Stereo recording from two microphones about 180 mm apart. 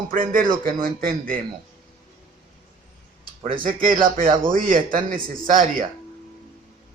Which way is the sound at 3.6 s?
50° right (ahead or behind).